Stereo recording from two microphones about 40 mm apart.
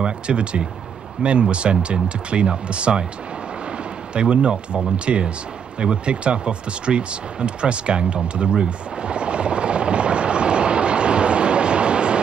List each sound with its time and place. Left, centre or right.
0.0 s speech: right
4.1 s speech: right
5.8 s a sound: right